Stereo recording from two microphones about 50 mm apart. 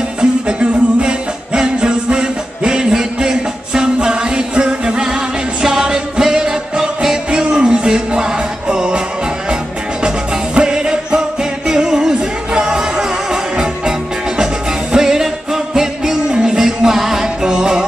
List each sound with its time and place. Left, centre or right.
0.2 s music: centre
10.0 s music: centre